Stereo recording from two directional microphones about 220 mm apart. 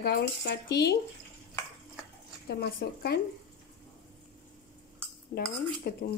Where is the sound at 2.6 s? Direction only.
50° left (ahead or behind).